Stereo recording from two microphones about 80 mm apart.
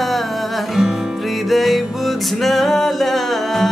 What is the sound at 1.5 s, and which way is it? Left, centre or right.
Music, centre.